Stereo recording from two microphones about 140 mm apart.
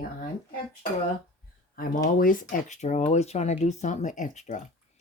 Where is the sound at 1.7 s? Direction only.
80° left.